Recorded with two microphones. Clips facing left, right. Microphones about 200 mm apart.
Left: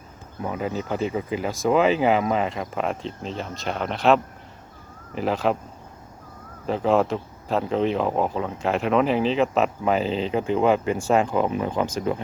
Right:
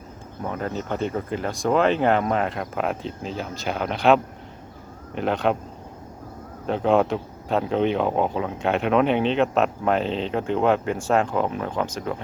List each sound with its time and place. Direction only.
0.4 s speech: 5° left (ahead or behind)
6.7 s speech: centre (ahead or behind)